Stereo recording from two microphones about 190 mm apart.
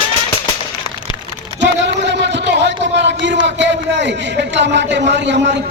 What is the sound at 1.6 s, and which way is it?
A man's voice, 70° right (ahead or behind).